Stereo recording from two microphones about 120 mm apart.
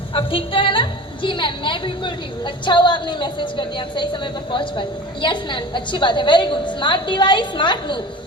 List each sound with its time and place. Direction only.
0.1 s a woman's voice: 45° left (ahead or behind)